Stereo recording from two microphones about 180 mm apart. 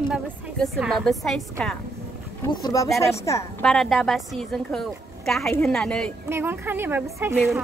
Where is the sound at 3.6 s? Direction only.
Centre (ahead or behind).